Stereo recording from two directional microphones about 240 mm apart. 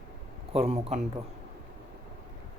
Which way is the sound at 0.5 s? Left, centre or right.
Right.